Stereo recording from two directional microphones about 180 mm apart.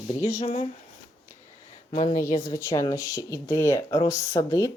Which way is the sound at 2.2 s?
15° left (ahead or behind).